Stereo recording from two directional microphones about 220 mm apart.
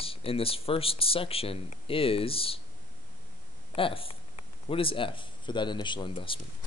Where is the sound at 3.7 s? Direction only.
25° left (ahead or behind).